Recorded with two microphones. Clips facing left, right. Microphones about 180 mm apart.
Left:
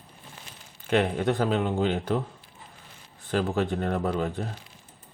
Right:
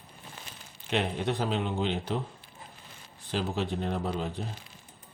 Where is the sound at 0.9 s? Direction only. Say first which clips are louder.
Left 6 dB; 55° left (ahead or behind).